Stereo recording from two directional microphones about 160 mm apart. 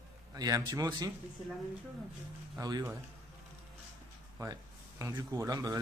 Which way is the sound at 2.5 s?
20° right (ahead or behind).